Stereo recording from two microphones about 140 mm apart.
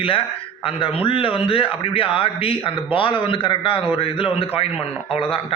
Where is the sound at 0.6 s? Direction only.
40° left (ahead or behind).